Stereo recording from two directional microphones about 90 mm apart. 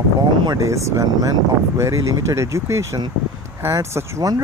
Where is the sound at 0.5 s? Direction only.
35° right (ahead or behind).